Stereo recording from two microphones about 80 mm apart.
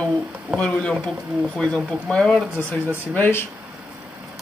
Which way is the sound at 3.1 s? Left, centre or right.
Left.